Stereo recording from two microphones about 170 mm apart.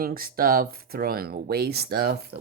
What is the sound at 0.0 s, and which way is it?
Speech, 60° right (ahead or behind).